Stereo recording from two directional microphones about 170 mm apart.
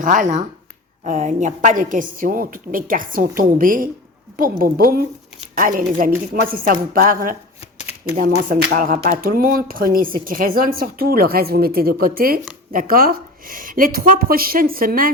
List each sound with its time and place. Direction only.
0.0 s a woman's voice: 50° right (ahead or behind)
7.8 s shuffling cards: 10° right (ahead or behind)
8.1 s speech: 55° right (ahead or behind)